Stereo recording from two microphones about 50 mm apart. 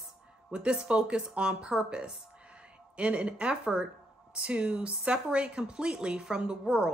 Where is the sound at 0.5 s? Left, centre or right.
Right.